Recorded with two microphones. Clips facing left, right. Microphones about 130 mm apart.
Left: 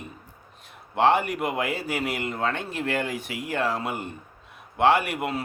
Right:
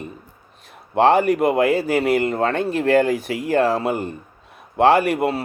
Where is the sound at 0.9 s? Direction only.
40° right (ahead or behind).